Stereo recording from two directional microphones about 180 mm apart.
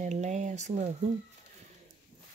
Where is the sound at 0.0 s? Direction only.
40° right (ahead or behind).